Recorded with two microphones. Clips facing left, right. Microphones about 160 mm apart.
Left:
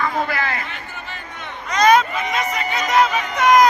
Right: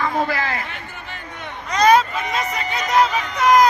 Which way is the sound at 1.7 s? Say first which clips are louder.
Even; 30° right (ahead or behind).